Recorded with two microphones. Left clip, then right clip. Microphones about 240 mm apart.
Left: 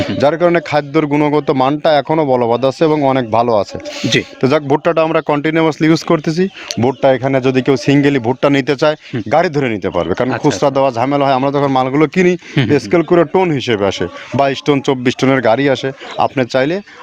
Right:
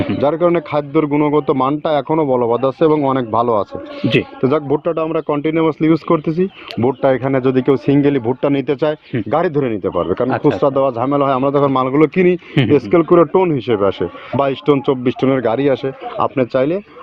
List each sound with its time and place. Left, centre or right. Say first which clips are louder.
0.2 s a man's voice: left 3 dB; left